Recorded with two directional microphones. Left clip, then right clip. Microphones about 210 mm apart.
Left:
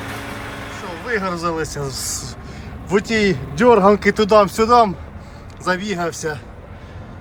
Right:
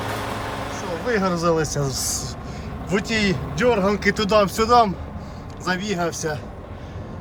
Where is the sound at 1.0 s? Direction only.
15° right (ahead or behind).